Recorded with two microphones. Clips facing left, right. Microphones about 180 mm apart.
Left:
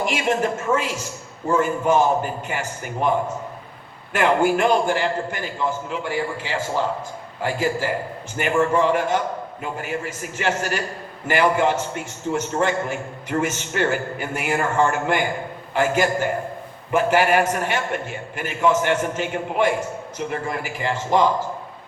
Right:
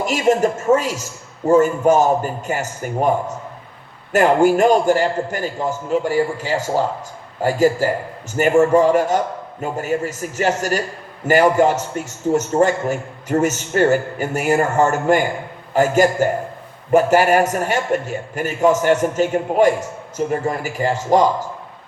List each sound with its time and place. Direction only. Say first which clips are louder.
0.0 s a man's voice: right 5 dB; 40° right (ahead or behind)